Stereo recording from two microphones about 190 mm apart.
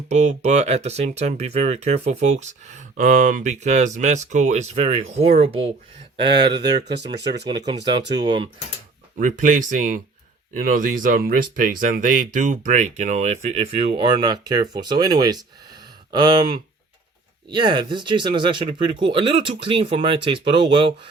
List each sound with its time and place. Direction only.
0.1 s speech: 35° right (ahead or behind)
7.3 s speech: 20° right (ahead or behind)
9.1 s speech: 45° right (ahead or behind); by 20.9 s 25° right (ahead or behind)